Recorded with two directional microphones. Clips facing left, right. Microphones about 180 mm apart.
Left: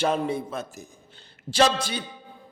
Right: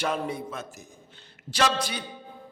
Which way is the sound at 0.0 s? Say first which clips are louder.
Left 4 dB; 30° left (ahead or behind).